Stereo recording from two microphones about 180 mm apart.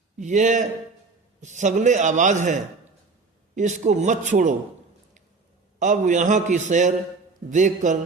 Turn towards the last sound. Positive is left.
turn(degrees=-45)  # may be behind; listen again after turning